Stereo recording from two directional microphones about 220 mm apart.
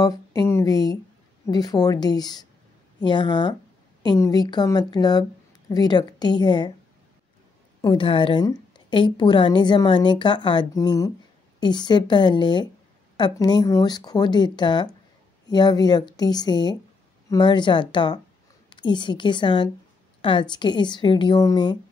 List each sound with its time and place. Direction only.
0.0 s a woman's voice: 15° left (ahead or behind)
7.8 s a woman's voice: 20° left (ahead or behind)